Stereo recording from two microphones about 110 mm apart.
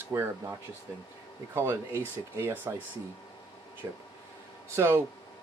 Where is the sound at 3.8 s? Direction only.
25° right (ahead or behind).